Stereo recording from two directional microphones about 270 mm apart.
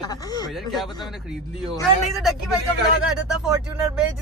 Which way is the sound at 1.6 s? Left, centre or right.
Centre.